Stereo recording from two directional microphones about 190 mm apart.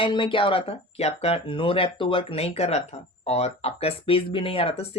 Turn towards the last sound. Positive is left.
turn(degrees=30)  # may be behind; listen again after turning